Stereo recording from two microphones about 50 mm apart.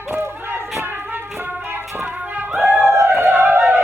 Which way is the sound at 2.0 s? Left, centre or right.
Right.